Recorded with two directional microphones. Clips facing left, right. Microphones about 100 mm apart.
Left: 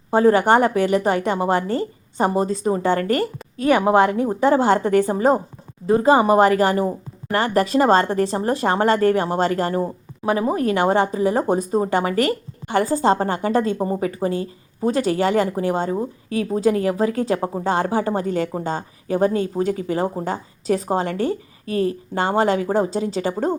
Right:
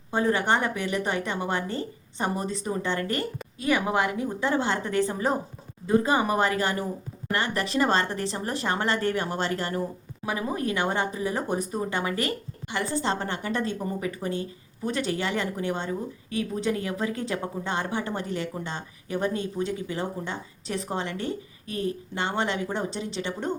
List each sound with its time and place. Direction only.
0.1 s a woman's voice: 40° left (ahead or behind)
1.6 s a woman's voice: 55° left (ahead or behind)
2.2 s a woman's voice: 30° left (ahead or behind)
12.2 s a woman's voice: 50° left (ahead or behind)